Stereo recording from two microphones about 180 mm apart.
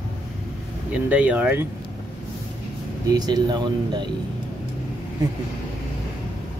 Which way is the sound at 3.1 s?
25° right (ahead or behind).